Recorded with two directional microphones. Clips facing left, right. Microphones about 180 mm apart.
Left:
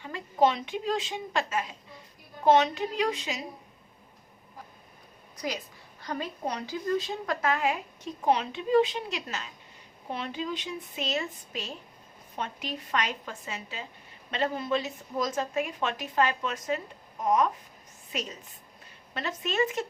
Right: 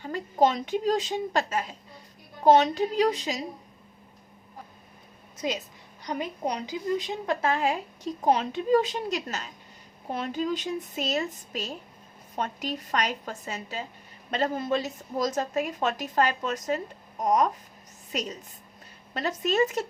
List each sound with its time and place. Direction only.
0.0 s a woman's voice: 40° right (ahead or behind)
5.4 s a woman's voice: 25° right (ahead or behind); by 19.8 s 40° right (ahead or behind)